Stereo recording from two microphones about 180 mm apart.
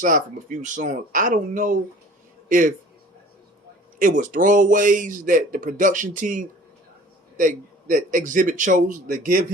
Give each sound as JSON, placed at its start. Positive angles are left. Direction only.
{"t": 0.0, "sound": "speech", "side_deg": -45}
{"t": 3.9, "sound": "speech", "side_deg": -45}